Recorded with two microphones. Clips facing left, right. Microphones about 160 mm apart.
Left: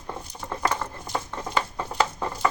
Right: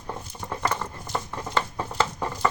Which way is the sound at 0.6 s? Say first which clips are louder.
Left 2 dB; 5° left (ahead or behind).